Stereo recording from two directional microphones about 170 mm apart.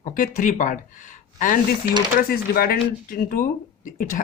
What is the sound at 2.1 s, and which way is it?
Speech, 60° left (ahead or behind).